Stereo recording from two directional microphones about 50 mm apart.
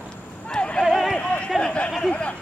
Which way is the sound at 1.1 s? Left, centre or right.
Centre.